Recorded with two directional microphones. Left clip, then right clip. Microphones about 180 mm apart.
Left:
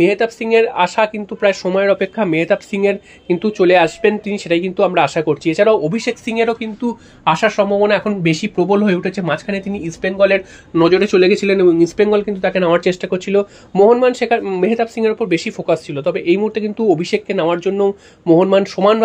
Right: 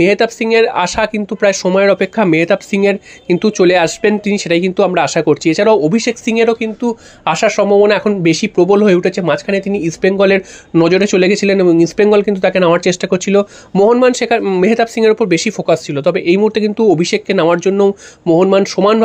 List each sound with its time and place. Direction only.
0.0 s speech: 35° right (ahead or behind)